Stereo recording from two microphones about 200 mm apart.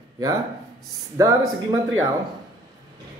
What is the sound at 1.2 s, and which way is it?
Speech, 15° right (ahead or behind).